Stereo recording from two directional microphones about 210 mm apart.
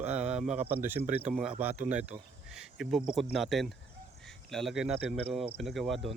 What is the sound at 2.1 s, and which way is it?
Speech, 30° right (ahead or behind).